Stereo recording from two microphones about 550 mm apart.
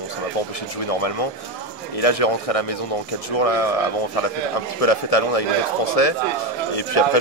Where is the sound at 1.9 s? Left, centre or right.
Left.